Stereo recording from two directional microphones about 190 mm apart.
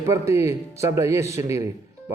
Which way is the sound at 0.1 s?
15° right (ahead or behind).